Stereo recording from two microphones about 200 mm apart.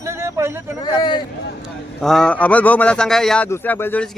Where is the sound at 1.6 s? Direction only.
Centre (ahead or behind).